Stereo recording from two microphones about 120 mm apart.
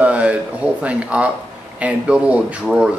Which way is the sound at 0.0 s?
10° right (ahead or behind).